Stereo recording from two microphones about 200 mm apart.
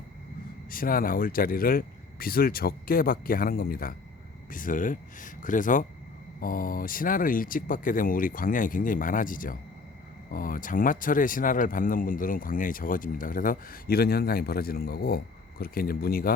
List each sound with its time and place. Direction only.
0.7 s speech: 45° left (ahead or behind)